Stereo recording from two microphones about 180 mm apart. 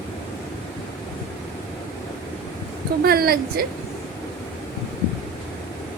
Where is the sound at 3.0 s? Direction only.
60° right (ahead or behind).